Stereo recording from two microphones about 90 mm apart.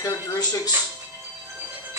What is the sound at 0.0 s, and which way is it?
Speech, 45° left (ahead or behind).